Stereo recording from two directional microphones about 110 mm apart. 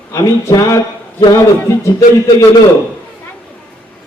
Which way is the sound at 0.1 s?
30° left (ahead or behind).